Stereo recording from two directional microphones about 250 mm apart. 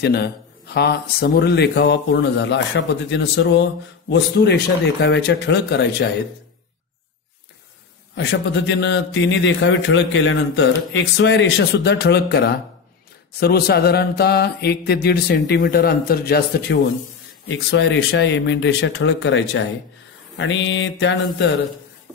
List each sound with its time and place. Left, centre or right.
0.0 s a man's voice: left
8.1 s a man's voice: left